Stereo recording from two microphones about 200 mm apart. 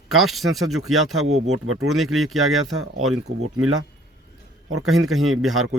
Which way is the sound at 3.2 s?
90° right.